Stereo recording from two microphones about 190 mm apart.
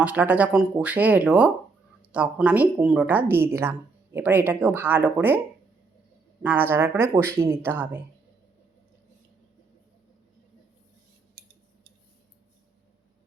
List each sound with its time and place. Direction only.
0.0 s speech: 10° right (ahead or behind)
6.4 s speech: 10° right (ahead or behind)
11.4 s a sound: 55° right (ahead or behind)